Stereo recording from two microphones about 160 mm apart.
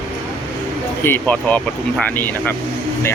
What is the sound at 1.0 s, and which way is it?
Speech, 10° left (ahead or behind).